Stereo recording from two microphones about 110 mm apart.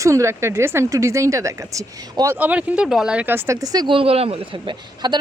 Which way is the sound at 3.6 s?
35° right (ahead or behind).